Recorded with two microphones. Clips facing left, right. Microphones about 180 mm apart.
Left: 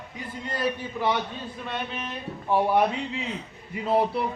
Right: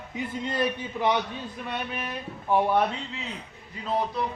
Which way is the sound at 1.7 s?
10° right (ahead or behind).